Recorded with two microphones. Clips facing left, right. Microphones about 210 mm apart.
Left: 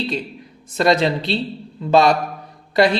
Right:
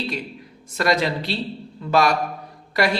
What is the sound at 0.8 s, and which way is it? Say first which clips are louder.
Speech: left 4 dB; 25° left (ahead or behind).